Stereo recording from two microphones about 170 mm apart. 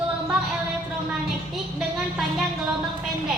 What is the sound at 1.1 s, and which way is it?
A woman's voice, 5° right (ahead or behind).